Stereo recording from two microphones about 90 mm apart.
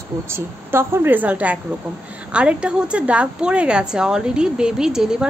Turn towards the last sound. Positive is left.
turn(degrees=-10)  # may be behind; listen again after turning